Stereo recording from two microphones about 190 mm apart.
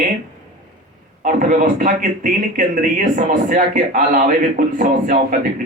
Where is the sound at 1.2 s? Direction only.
45° right (ahead or behind).